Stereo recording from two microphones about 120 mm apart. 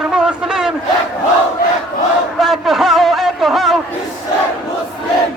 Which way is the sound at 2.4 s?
Centre (ahead or behind).